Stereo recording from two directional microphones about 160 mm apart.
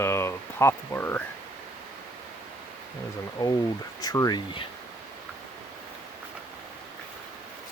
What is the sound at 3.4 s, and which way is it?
Speech, 20° left (ahead or behind).